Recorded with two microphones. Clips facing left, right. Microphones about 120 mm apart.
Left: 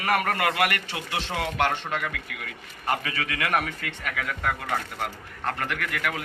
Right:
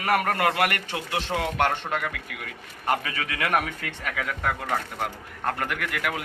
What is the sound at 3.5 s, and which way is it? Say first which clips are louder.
Speech: right 2 dB; 5° right (ahead or behind).